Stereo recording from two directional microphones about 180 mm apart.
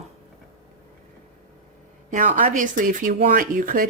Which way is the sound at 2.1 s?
45° right (ahead or behind).